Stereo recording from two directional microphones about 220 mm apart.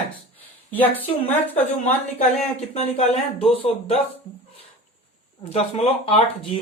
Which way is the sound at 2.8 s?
30° left (ahead or behind).